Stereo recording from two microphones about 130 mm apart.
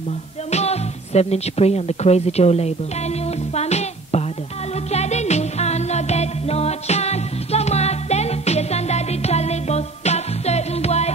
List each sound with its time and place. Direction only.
0.5 s speech: 55° left (ahead or behind)
3.5 s music: 55° left (ahead or behind)